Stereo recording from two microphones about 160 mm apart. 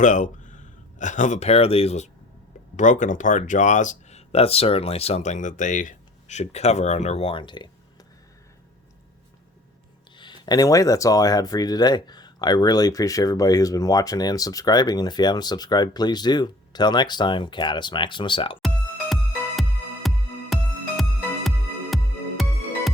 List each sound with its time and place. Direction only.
0.0 s speech: 50° left (ahead or behind)
2.7 s speech: 50° left (ahead or behind); by 7.7 s 30° left (ahead or behind)
10.2 s speech: 25° left (ahead or behind)
18.6 s music: centre (ahead or behind)